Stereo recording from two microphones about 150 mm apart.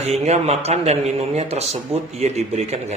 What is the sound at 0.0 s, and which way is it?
Speech, 45° right (ahead or behind).